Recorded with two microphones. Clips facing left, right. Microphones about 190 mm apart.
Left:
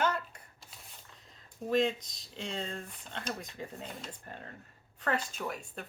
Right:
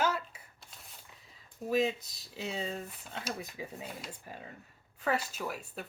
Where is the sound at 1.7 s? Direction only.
5° right (ahead or behind).